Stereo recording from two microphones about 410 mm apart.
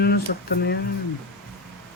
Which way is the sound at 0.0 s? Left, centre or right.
Left.